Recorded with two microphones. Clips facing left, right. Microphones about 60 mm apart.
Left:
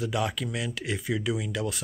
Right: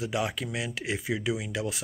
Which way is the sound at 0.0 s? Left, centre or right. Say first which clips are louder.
Left 1 dB; centre.